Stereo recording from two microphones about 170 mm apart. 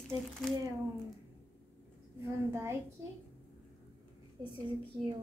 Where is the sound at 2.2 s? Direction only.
15° right (ahead or behind).